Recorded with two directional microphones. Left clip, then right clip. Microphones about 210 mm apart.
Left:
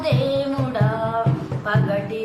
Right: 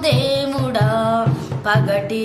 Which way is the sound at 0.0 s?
55° right (ahead or behind).